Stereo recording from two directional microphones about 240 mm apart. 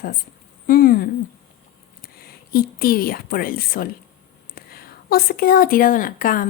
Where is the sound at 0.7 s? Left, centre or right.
Left.